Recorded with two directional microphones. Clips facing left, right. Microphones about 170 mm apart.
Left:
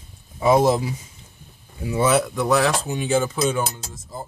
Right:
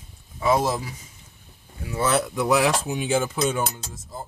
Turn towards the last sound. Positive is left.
turn(degrees=5)  # may be behind; listen again after turning